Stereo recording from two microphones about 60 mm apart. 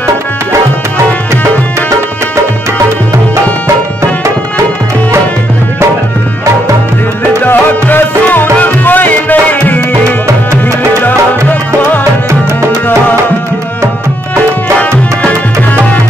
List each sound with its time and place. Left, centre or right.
7.4 s music: left
15.2 s music: left